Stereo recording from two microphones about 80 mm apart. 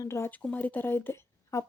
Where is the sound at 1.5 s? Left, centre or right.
Left.